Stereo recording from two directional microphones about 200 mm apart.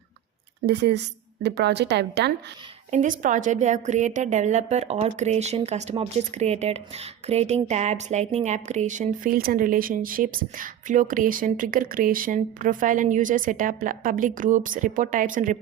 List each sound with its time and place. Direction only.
0.6 s a woman's voice: 55° right (ahead or behind)
2.9 s a woman's voice: 40° right (ahead or behind)